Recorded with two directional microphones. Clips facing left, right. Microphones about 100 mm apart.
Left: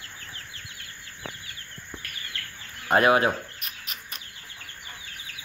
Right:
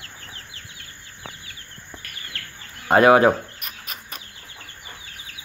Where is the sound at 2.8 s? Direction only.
30° right (ahead or behind).